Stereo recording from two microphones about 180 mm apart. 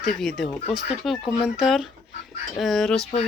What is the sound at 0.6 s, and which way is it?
Speech, 35° left (ahead or behind).